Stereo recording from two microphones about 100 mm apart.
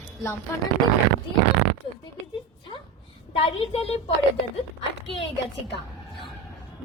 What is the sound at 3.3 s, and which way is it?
Speech, 85° left.